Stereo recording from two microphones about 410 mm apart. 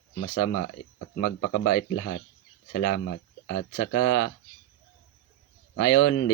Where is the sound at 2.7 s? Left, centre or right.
Left.